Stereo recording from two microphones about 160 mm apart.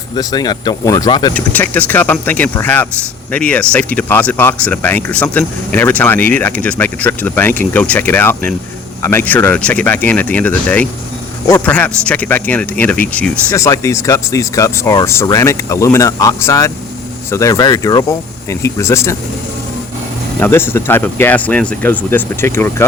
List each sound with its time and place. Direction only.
0.2 s speech: 25° left (ahead or behind)
1.3 s speech: 10° left (ahead or behind)
13.5 s speech: 20° left (ahead or behind)
20.4 s speech: 15° left (ahead or behind)